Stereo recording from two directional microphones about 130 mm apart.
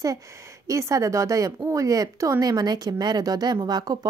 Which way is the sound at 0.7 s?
25° right (ahead or behind).